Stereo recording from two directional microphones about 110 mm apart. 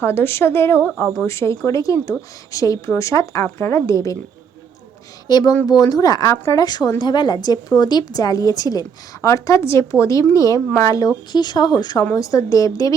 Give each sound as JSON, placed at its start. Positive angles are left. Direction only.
{"t": 0.0, "sound": "a woman's voice", "side_deg": 20}
{"t": 5.3, "sound": "a woman's voice", "side_deg": 35}
{"t": 6.2, "sound": "a woman's voice", "side_deg": 25}
{"t": 6.6, "sound": "a woman's voice", "side_deg": 35}